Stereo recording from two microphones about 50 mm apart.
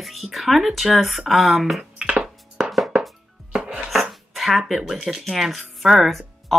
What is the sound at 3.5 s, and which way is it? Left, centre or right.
Chopping, centre.